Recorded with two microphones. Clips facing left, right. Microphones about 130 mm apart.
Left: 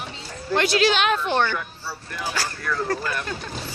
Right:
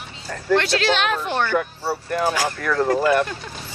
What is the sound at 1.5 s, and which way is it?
Speech, 55° right (ahead or behind).